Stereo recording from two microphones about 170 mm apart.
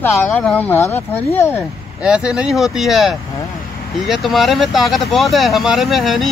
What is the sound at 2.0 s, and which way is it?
Speech, 5° right (ahead or behind).